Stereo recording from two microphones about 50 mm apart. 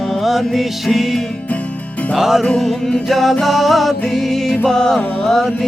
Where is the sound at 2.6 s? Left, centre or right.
Centre.